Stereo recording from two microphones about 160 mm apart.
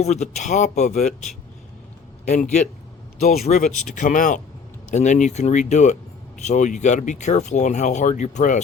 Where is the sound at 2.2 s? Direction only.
45° left (ahead or behind).